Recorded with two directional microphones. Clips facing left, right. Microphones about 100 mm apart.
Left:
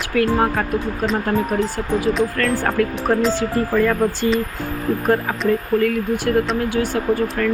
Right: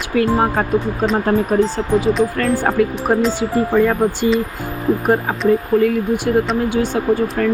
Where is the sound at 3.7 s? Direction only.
25° right (ahead or behind).